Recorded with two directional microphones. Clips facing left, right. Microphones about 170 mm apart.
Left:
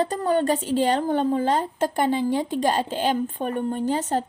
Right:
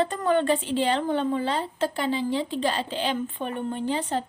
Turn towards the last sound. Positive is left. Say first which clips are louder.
# left 3 dB
turn(degrees=45)  # may be behind; listen again after turning